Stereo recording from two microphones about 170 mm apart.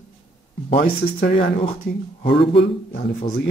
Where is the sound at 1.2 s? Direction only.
60° left (ahead or behind).